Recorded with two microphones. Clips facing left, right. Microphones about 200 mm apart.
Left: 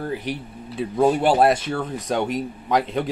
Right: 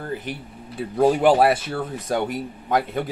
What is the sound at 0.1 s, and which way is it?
Speech, 50° right (ahead or behind).